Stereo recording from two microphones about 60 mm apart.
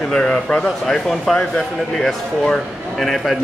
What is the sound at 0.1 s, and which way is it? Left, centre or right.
Speech, centre.